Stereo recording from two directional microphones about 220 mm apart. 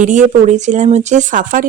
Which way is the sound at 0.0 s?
35° right (ahead or behind).